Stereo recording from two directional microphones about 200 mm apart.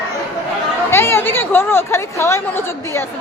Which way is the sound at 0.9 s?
10° left (ahead or behind).